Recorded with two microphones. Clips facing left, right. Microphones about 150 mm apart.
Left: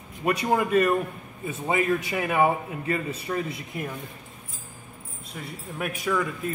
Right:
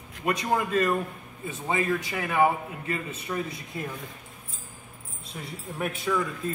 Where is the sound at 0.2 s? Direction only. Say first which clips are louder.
Left 3 dB; 30° left (ahead or behind).